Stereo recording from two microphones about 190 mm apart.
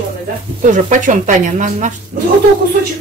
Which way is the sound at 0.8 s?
40° right (ahead or behind).